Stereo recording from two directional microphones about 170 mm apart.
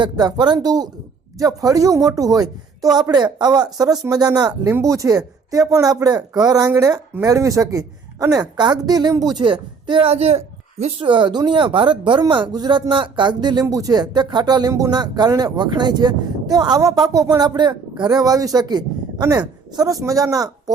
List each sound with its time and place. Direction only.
0.0 s speech: 25° right (ahead or behind)